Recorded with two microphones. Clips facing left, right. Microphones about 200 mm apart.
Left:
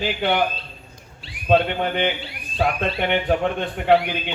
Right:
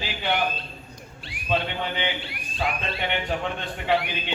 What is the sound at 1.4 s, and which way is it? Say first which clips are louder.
A man's voice: left 8 dB; 55° left (ahead or behind).